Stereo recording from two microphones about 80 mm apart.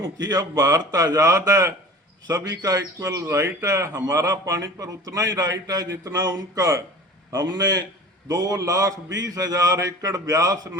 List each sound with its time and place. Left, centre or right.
0.3 s speech: right
2.2 s speech: right
6.6 s speech: right
7.3 s a man's voice: right